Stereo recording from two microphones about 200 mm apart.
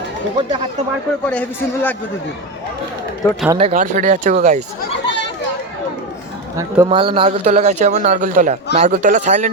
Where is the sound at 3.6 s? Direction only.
35° right (ahead or behind).